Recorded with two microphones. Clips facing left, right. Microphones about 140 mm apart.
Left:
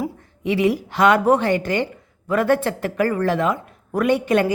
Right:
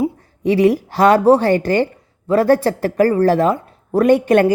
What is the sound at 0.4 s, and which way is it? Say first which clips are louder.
A woman's voice: right 6 dB; 45° right (ahead or behind).